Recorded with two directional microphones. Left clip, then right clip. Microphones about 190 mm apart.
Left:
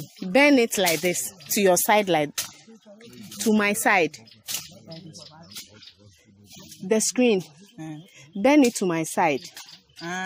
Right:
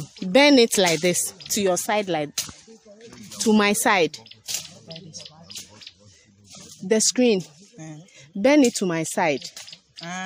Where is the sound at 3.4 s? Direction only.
30° right (ahead or behind).